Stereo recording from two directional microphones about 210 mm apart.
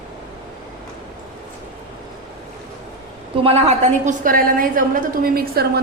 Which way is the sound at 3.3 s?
25° right (ahead or behind).